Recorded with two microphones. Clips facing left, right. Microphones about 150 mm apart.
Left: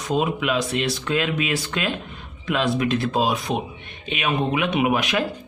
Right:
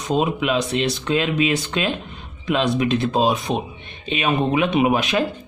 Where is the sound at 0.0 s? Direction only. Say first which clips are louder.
Right 2 dB; 25° right (ahead or behind).